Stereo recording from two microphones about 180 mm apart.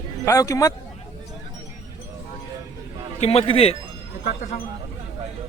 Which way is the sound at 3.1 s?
35° left (ahead or behind).